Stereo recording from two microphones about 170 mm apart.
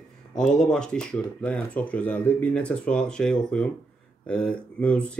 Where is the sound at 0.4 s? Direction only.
5° left (ahead or behind).